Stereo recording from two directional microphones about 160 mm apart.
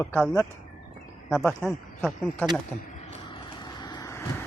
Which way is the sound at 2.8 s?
50° left (ahead or behind).